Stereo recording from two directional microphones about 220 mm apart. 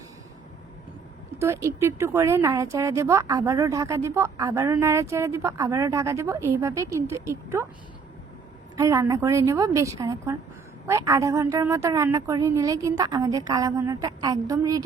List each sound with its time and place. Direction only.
1.4 s speech: 10° right (ahead or behind)
8.7 s speech: 15° right (ahead or behind)